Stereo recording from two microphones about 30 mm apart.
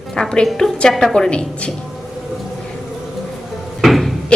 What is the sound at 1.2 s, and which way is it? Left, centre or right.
Speech, left.